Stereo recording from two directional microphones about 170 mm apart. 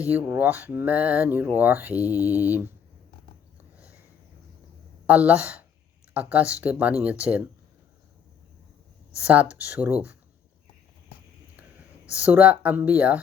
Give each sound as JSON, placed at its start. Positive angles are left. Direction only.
{"t": 0.1, "sound": "speech", "side_deg": -10}
{"t": 2.0, "sound": "mantra", "side_deg": 20}
{"t": 2.4, "sound": "speech", "side_deg": -10}
{"t": 5.0, "sound": "speech", "side_deg": -10}
{"t": 9.2, "sound": "speech", "side_deg": -10}
{"t": 12.2, "sound": "speech", "side_deg": -10}